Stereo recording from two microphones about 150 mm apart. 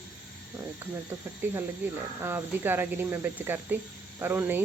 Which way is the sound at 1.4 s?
15° right (ahead or behind).